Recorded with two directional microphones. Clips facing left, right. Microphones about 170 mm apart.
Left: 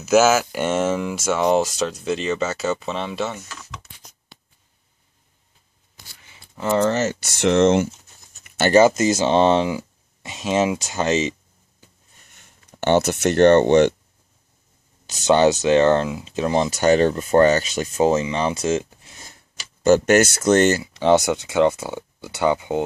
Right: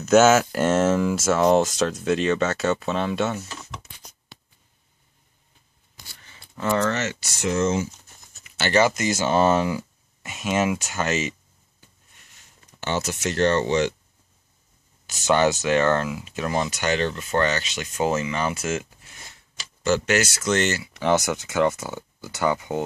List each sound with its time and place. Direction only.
0.0 s speech: 5° left (ahead or behind)
3.4 s a sound: 25° right (ahead or behind)
6.2 s scissors: 10° left (ahead or behind)
6.7 s speech: 30° left (ahead or behind)
7.3 s speech: 75° left (ahead or behind)
8.7 s speech: 25° left (ahead or behind)
12.4 s speech: 60° left (ahead or behind)
15.2 s speech: 20° left (ahead or behind); by 17.6 s 40° left (ahead or behind)
17.9 s speech: 25° left (ahead or behind)
19.8 s speech: 50° left (ahead or behind); by 21.3 s 30° left (ahead or behind)
21.3 s speech: 20° left (ahead or behind)